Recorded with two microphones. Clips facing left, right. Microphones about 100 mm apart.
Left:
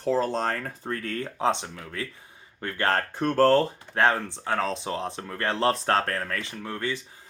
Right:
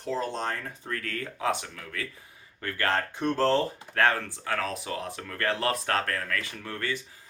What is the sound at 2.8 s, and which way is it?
Speech, 40° left (ahead or behind).